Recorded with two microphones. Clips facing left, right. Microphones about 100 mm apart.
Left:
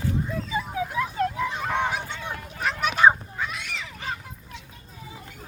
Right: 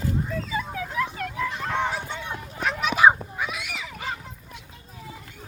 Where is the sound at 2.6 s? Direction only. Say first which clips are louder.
Right 1 dB; centre (ahead or behind).